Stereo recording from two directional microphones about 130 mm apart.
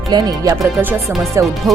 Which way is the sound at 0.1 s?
30° right (ahead or behind).